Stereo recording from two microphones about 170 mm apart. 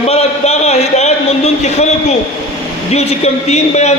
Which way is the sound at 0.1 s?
35° left (ahead or behind).